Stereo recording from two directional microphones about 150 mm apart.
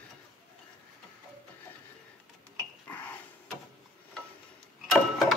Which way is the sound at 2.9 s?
15° left (ahead or behind).